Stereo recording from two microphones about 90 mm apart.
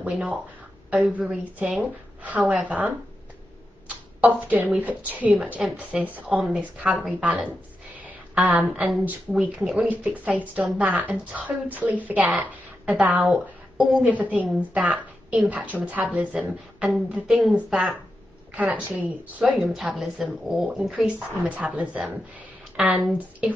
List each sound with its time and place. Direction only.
0.1 s a woman's voice: 10° right (ahead or behind)
4.2 s a woman's voice: 15° right (ahead or behind)
18.5 s a woman's voice: 15° right (ahead or behind)
19.6 s a woman's voice: centre (ahead or behind)
20.9 s a woman's voice: 15° right (ahead or behind)